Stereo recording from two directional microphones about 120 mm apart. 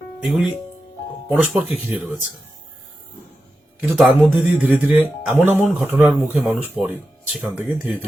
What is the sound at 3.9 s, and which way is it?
Speech, 10° right (ahead or behind).